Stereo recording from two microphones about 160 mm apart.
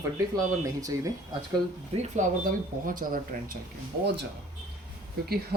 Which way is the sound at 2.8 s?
60° right (ahead or behind).